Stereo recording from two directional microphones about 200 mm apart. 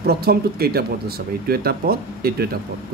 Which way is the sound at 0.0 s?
50° right (ahead or behind).